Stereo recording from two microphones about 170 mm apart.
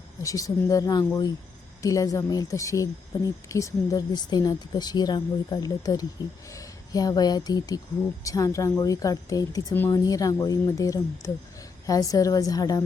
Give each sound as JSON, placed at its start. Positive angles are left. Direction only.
{"t": 0.2, "sound": "speech", "side_deg": 20}